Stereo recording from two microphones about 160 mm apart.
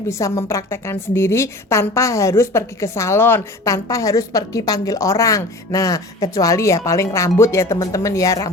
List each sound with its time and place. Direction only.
0.1 s a woman's voice: 20° left (ahead or behind)